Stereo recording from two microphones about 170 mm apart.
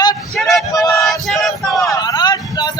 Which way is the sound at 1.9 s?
25° left (ahead or behind).